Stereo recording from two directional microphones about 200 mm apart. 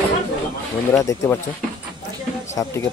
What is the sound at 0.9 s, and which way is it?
Speech, 15° left (ahead or behind).